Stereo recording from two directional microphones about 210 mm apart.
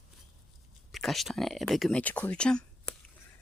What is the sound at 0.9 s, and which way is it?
Speech, centre (ahead or behind).